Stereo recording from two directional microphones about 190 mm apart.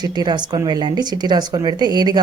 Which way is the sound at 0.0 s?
20° right (ahead or behind).